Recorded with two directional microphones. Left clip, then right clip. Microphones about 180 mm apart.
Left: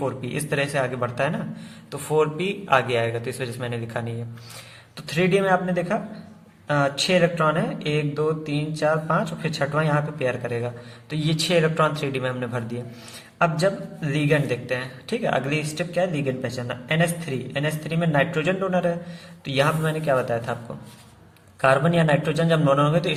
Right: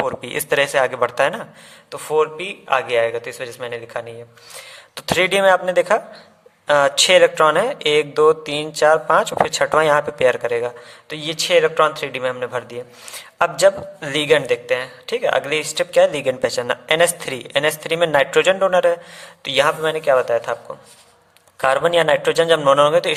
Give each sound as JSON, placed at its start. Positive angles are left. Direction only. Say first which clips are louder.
{"t": 0.2, "sound": "a man's voice", "louder": "right 7 dB", "side_deg": -35}
{"t": 1.9, "sound": "a man's voice", "louder": "right 4 dB", "side_deg": -25}
{"t": 4.9, "sound": "a man's voice", "louder": "right 5 dB", "side_deg": -40}
{"t": 13.4, "sound": "a man's voice", "louder": "right 7 dB", "side_deg": -45}
{"t": 21.6, "sound": "a man's voice", "louder": "right 4 dB", "side_deg": -40}